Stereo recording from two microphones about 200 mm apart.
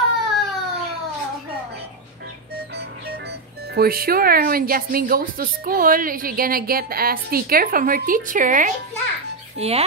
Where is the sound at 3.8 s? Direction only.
50° right (ahead or behind).